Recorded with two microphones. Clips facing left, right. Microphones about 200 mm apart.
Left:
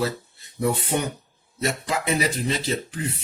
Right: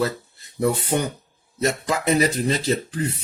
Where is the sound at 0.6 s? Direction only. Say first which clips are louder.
Right 2 dB; 40° right (ahead or behind).